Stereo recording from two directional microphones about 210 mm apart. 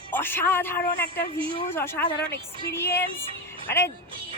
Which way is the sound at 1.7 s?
10° left (ahead or behind).